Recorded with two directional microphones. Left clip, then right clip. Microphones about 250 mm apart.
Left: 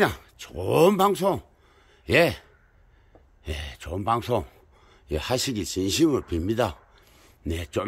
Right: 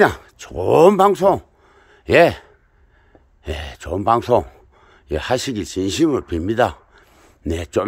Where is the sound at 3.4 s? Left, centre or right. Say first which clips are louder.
Right 8 dB; centre.